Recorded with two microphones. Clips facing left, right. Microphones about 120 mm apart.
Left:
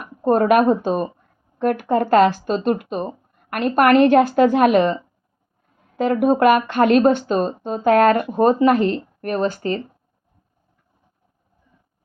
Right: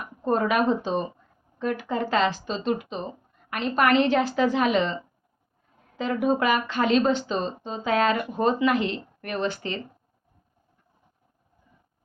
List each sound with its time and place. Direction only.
0.2 s speech: 50° left (ahead or behind)
6.0 s speech: 55° left (ahead or behind)